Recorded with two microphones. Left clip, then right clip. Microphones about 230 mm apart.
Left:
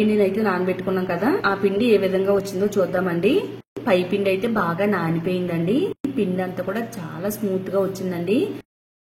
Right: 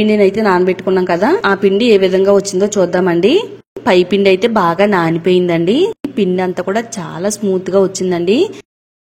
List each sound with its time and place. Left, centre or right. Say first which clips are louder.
0.1 s a woman's voice: right 9 dB; right